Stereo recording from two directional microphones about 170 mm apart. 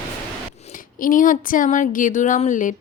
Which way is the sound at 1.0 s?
55° left (ahead or behind).